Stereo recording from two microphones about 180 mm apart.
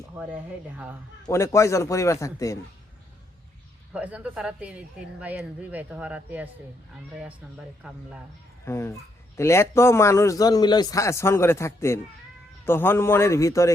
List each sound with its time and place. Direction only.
0.2 s speech: 5° right (ahead or behind)
1.3 s speech: 15° left (ahead or behind)
3.9 s a woman's voice: 5° right (ahead or behind)
8.6 s speech: 15° left (ahead or behind)